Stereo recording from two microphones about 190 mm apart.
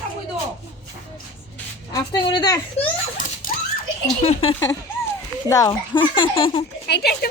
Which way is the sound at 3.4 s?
45° left (ahead or behind).